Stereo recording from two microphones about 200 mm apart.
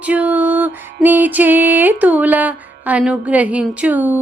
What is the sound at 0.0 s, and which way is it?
Music, 5° right (ahead or behind).